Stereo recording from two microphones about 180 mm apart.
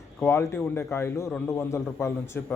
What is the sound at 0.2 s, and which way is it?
A man's voice, 15° left (ahead or behind).